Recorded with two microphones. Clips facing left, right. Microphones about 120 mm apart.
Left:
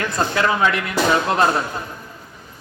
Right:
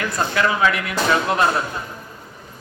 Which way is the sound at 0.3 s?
30° left (ahead or behind).